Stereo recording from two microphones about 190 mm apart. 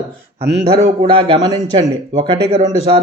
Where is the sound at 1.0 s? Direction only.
30° right (ahead or behind).